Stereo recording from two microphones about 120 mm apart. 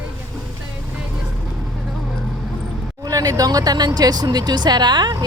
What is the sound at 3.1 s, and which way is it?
Speech, 30° right (ahead or behind).